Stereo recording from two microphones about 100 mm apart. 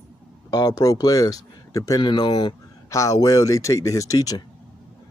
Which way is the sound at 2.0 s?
50° left (ahead or behind).